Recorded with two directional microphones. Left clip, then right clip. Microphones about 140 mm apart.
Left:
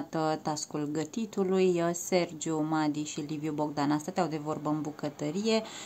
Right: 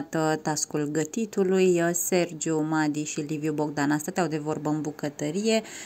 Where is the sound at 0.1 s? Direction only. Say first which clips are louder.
Right 5 dB; 20° right (ahead or behind).